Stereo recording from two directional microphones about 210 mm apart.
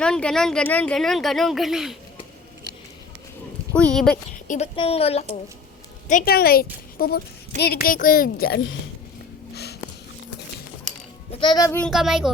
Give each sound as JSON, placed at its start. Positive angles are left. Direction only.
{"t": 0.0, "sound": "speech", "side_deg": 5}
{"t": 3.8, "sound": "speech", "side_deg": 5}
{"t": 4.4, "sound": "a woman's voice", "side_deg": 30}
{"t": 6.1, "sound": "a child's voice", "side_deg": 40}
{"t": 11.3, "sound": "a woman's voice", "side_deg": 25}
{"t": 11.8, "sound": "speech", "side_deg": 0}